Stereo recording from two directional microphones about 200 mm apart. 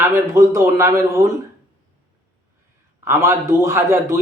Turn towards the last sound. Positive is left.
turn(degrees=-15)  # may be behind; listen again after turning